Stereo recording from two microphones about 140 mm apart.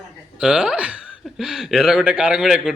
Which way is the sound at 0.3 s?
5° right (ahead or behind).